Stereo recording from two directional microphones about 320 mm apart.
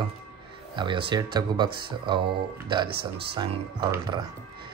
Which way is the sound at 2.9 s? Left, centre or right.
Right.